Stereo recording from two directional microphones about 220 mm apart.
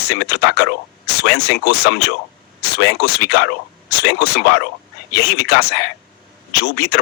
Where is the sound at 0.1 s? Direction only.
50° left (ahead or behind).